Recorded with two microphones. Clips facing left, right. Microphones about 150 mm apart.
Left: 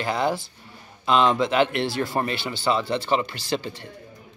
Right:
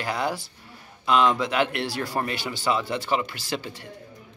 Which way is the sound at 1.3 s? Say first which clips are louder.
Left 4 dB; 5° right (ahead or behind).